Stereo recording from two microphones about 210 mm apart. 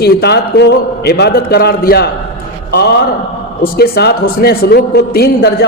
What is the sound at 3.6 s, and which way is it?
A man's voice, 50° left (ahead or behind).